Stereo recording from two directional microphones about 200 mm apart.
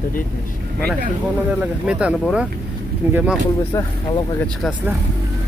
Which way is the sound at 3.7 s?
20° left (ahead or behind).